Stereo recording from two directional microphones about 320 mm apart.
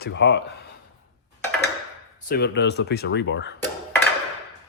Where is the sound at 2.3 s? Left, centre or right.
Left.